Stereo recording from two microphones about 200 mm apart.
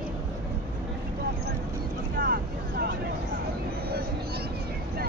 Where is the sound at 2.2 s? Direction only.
50° right (ahead or behind).